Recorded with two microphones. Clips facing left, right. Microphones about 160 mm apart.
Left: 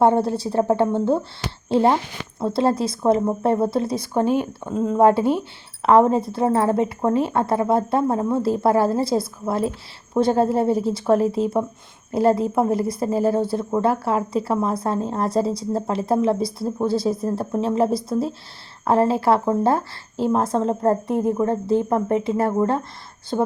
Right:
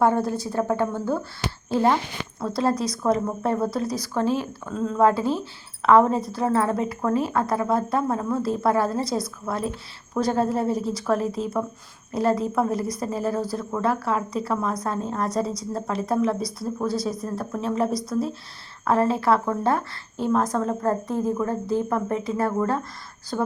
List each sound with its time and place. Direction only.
0.0 s speech: 30° left (ahead or behind)
5.8 s speech: 30° left (ahead or behind)